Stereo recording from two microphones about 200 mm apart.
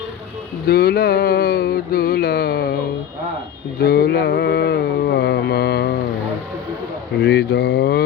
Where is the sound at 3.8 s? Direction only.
50° left (ahead or behind).